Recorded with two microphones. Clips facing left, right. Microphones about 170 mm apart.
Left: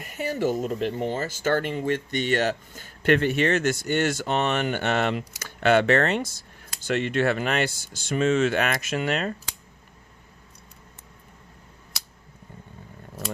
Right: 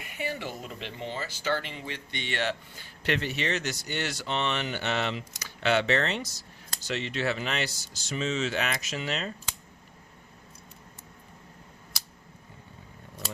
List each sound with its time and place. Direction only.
0.0 s speech: 40° left (ahead or behind)